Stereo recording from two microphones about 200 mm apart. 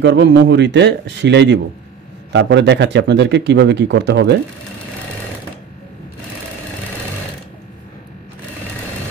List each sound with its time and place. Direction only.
0.0 s speech: 60° right (ahead or behind)